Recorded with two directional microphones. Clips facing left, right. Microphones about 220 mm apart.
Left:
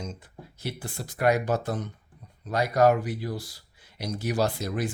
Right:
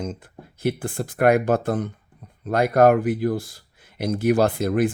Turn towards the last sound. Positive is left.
turn(degrees=-55)  # may be behind; listen again after turning